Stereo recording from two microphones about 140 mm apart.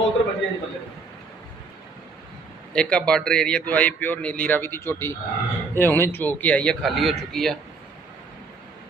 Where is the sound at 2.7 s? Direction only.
5° left (ahead or behind).